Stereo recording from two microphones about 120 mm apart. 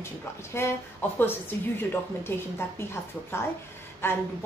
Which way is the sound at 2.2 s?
20° left (ahead or behind).